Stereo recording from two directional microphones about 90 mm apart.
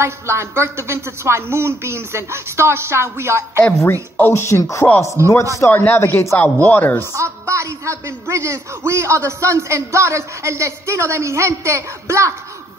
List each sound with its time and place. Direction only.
0.0 s a woman's voice: 30° right (ahead or behind)
3.8 s speech: 30° left (ahead or behind)
5.2 s a man's voice: 35° right (ahead or behind)
5.7 s a man's voice: 25° left (ahead or behind)
7.2 s a man's voice: 30° right (ahead or behind)